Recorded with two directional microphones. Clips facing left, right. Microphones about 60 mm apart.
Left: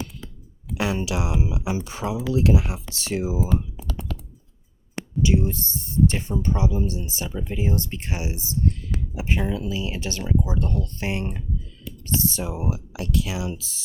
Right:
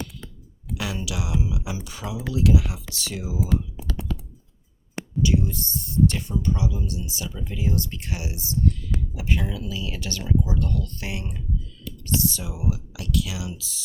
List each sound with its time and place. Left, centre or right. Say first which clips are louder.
0.8 s speech: left 6 dB; left
5.2 s speech: left 2 dB; left